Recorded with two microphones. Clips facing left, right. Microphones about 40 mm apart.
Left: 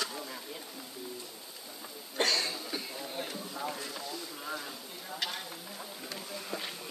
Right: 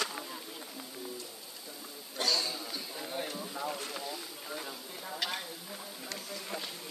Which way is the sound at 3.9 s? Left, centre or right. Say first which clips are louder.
Even; centre.